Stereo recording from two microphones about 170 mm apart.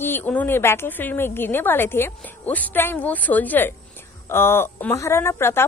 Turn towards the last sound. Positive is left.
turn(degrees=15)  # may be behind; listen again after turning